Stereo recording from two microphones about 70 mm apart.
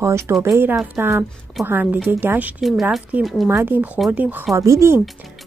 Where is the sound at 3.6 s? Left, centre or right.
Right.